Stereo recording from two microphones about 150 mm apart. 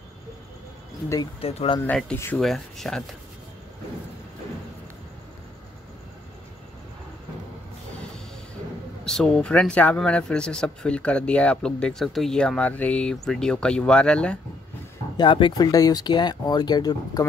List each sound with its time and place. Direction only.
1.4 s speech: 40° left (ahead or behind)
1.9 s speech: 5° left (ahead or behind)
9.0 s speech: 5° left (ahead or behind)
15.1 s speech: 35° left (ahead or behind)